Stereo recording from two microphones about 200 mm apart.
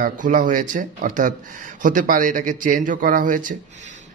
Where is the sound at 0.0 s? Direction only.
40° right (ahead or behind).